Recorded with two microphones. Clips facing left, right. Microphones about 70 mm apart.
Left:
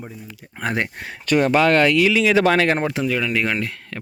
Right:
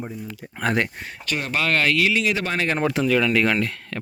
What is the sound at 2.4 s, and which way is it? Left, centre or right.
Speech, left.